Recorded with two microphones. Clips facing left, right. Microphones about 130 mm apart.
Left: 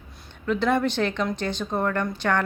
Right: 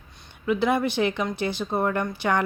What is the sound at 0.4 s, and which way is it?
A woman's voice, 10° right (ahead or behind).